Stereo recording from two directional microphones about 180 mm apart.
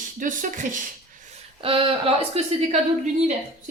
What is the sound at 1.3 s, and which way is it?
A woman's voice, 30° right (ahead or behind).